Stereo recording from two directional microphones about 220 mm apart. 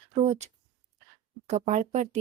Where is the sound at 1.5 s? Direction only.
30° right (ahead or behind).